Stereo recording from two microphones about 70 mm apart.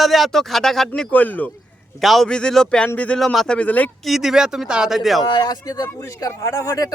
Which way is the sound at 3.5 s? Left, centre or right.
Left.